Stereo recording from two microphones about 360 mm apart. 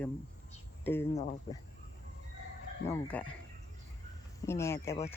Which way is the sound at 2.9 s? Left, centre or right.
Centre.